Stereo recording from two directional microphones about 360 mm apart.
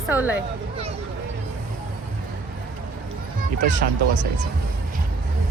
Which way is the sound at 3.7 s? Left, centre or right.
Right.